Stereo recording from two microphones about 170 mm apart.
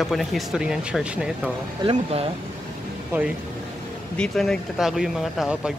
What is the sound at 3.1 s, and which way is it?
Speech, 15° right (ahead or behind).